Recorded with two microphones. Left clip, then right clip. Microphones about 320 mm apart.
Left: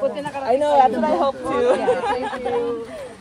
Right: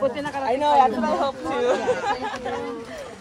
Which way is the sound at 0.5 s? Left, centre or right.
Centre.